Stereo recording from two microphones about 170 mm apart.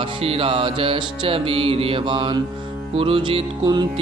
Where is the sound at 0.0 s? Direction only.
35° right (ahead or behind).